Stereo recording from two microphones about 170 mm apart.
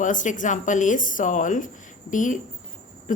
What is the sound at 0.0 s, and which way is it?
A woman's voice, 50° left (ahead or behind).